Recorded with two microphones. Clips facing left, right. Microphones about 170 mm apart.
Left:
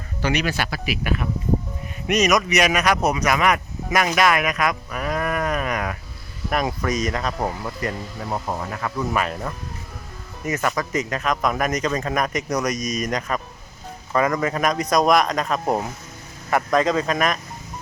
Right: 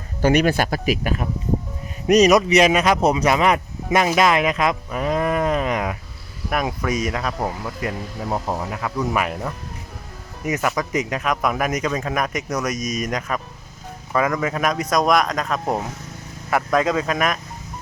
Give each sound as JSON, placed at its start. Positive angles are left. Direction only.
{"t": 0.2, "sound": "speech", "side_deg": -45}
{"t": 3.9, "sound": "a sound", "side_deg": -25}
{"t": 6.5, "sound": "speech", "side_deg": -5}